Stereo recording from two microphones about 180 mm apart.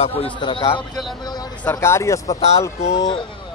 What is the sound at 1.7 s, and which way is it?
Speech, 15° left (ahead or behind).